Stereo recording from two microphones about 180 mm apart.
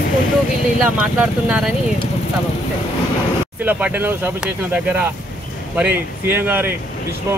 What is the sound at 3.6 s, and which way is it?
Speech, 10° right (ahead or behind).